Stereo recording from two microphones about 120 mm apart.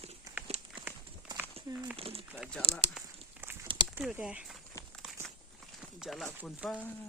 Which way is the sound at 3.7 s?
45° right (ahead or behind).